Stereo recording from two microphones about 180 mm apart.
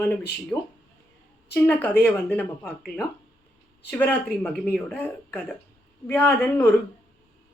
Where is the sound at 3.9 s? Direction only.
10° left (ahead or behind).